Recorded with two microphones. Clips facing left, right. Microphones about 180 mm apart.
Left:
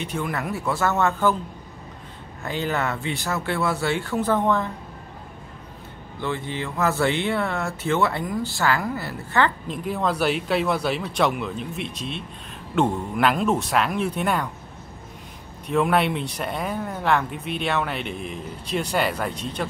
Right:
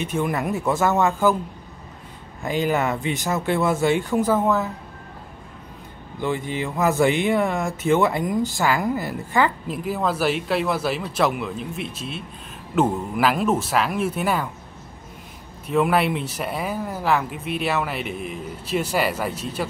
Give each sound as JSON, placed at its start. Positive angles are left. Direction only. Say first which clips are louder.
{"t": 0.0, "sound": "speech", "louder": "right 4 dB", "side_deg": -15}
{"t": 2.4, "sound": "speech", "louder": "right 4 dB", "side_deg": -15}
{"t": 6.2, "sound": "speech", "louder": "right 3 dB", "side_deg": -15}
{"t": 15.6, "sound": "speech", "louder": "right 1 dB", "side_deg": 0}